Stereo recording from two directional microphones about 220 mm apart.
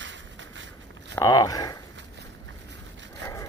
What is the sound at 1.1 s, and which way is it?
Speech, 15° left (ahead or behind).